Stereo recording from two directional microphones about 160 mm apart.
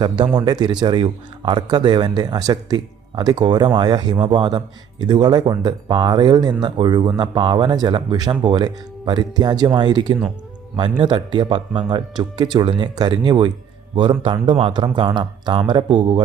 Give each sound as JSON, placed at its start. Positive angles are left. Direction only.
{"t": 0.3, "sound": "speech", "side_deg": -25}